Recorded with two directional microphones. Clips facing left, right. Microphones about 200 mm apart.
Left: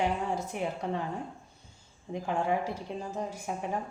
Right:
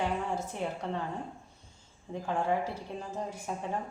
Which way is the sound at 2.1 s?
15° left (ahead or behind).